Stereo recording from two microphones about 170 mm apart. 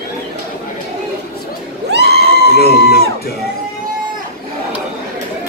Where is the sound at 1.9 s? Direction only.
70° right (ahead or behind).